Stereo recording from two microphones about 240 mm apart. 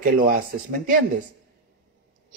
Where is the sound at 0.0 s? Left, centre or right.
Right.